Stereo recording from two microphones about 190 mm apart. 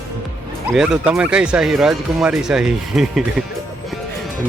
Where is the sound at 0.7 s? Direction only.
5° right (ahead or behind).